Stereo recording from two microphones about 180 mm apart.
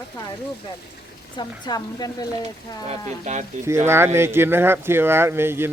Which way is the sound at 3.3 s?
40° right (ahead or behind).